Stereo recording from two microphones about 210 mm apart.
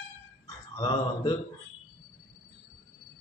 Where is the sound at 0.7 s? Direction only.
20° left (ahead or behind).